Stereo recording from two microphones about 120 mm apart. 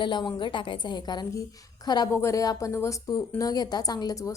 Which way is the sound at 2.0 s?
25° left (ahead or behind).